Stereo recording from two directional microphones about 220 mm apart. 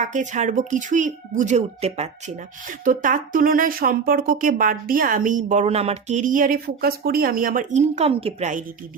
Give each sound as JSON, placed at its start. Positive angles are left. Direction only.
{"t": 0.0, "sound": "speech", "side_deg": -35}